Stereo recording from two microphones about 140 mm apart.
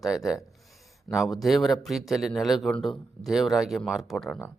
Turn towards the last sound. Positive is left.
turn(degrees=0)  # may be behind; listen again after turning